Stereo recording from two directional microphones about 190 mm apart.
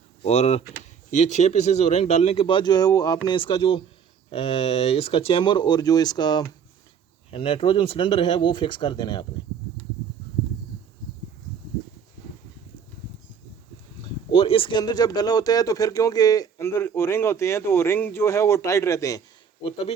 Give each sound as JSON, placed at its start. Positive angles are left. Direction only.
{"t": 0.3, "sound": "speech", "side_deg": 35}
{"t": 14.3, "sound": "speech", "side_deg": 30}